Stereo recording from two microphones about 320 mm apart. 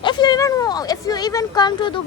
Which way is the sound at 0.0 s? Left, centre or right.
Centre.